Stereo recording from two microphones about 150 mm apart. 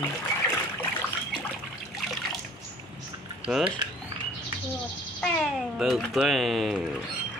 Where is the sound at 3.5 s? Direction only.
5° right (ahead or behind).